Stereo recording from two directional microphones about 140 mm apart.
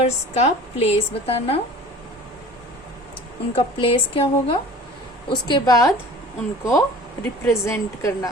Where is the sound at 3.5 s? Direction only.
40° left (ahead or behind); by 8.3 s 20° left (ahead or behind).